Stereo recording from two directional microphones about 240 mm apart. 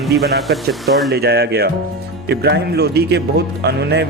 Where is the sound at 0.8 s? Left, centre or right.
Centre.